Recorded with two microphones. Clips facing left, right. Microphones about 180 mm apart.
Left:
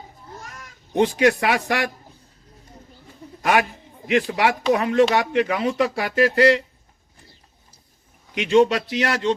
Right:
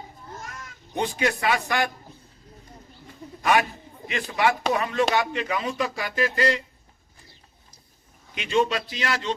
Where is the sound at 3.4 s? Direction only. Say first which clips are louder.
Left 2 dB; 70° left (ahead or behind).